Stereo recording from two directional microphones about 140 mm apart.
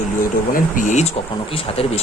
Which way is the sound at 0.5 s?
65° left (ahead or behind).